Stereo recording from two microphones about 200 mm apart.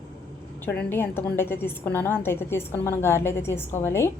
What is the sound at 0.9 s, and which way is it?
A woman's voice, 10° left (ahead or behind).